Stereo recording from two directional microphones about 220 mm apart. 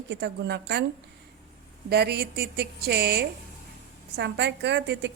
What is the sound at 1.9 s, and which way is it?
A woman's voice, 45° right (ahead or behind).